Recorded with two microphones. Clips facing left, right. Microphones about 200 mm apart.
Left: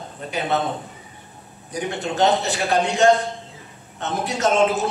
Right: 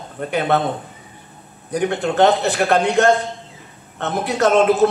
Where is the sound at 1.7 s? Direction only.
60° right (ahead or behind).